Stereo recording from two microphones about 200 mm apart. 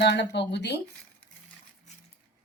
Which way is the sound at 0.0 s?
60° left (ahead or behind).